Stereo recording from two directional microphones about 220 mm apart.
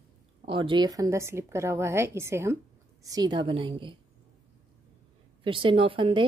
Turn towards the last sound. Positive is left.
turn(degrees=-25)  # may be behind; listen again after turning